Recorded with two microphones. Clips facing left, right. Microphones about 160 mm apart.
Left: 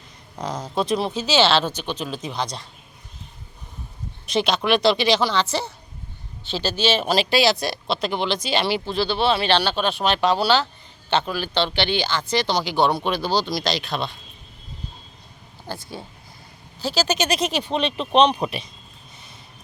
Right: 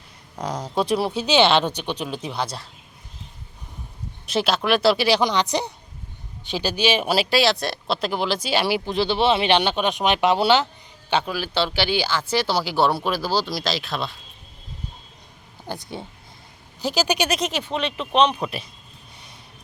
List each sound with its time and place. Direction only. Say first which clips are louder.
0.3 s speech: right 1 dB; 10° right (ahead or behind)
4.3 s speech: left 1 dB; 5° right (ahead or behind); by 10.7 s 20° right (ahead or behind)
11.1 s speech: left 1 dB; 10° right (ahead or behind)
15.6 s speech: right 1 dB; 20° right (ahead or behind)
17.6 s speech: left 2 dB; 20° left (ahead or behind)